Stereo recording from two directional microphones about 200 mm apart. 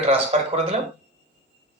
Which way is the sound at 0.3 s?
30° right (ahead or behind).